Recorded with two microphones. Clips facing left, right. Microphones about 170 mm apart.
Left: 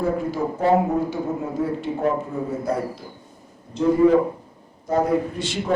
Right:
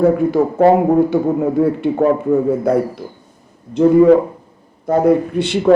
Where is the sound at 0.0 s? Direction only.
60° right (ahead or behind).